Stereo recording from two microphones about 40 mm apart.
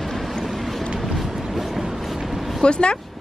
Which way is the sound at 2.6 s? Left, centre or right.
Left.